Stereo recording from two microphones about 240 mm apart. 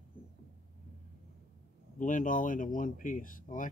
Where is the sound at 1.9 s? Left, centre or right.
Left.